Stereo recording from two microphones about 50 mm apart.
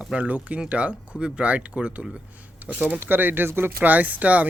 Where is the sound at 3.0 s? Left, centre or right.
Right.